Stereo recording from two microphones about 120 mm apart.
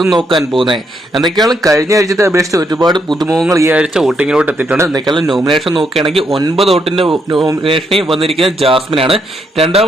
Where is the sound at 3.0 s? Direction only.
Centre (ahead or behind).